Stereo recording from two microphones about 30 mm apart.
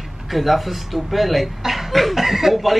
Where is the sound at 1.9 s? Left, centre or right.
Centre.